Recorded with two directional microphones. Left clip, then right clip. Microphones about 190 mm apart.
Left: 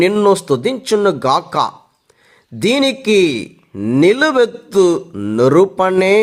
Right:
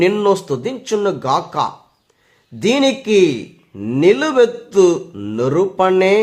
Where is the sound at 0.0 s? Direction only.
30° left (ahead or behind).